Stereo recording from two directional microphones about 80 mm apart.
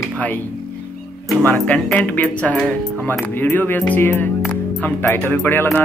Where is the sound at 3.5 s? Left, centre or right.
Left.